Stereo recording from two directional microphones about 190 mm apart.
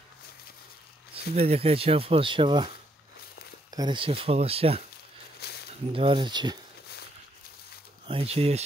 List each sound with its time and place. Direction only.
1.3 s speech: 35° right (ahead or behind)
3.7 s speech: 25° right (ahead or behind)
5.4 s a sound: 55° left (ahead or behind)
5.9 s speech: 25° right (ahead or behind)
8.1 s speech: 30° right (ahead or behind)